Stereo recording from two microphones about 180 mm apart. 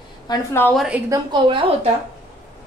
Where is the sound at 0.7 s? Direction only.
5° right (ahead or behind).